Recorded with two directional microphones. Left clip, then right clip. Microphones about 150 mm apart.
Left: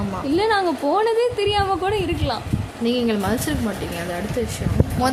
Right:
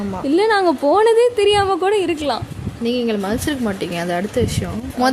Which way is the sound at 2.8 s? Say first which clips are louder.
Right 2 dB; 30° right (ahead or behind).